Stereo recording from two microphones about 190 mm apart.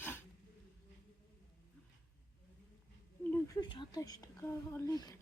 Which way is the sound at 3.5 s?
20° left (ahead or behind).